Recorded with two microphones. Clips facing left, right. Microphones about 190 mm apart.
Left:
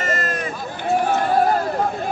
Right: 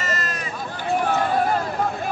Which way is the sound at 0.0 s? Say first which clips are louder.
Left 4 dB; 50° left (ahead or behind).